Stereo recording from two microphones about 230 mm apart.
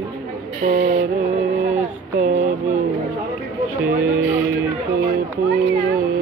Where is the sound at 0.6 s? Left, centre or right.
Right.